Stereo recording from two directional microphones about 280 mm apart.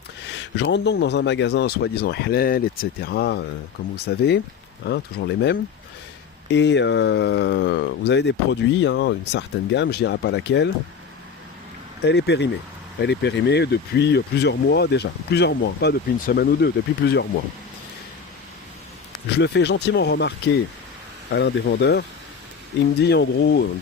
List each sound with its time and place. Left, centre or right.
0.3 s speech: left
12.0 s speech: left
19.4 s speech: left